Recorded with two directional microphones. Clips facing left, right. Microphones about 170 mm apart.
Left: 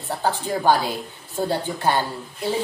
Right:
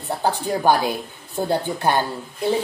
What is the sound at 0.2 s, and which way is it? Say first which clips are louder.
A woman's voice: right 2 dB; 15° right (ahead or behind).